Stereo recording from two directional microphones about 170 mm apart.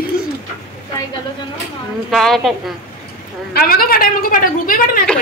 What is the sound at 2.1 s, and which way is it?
Speech, centre (ahead or behind).